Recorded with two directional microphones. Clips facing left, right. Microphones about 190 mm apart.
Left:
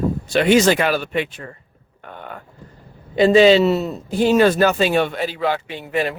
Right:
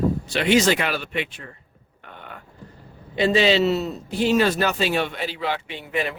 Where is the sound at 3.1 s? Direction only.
45° left (ahead or behind).